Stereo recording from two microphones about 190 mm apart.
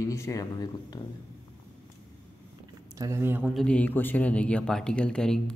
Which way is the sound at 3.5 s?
5° left (ahead or behind).